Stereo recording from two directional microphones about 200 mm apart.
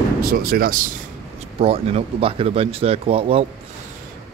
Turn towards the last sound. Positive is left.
turn(degrees=-30)  # may be behind; listen again after turning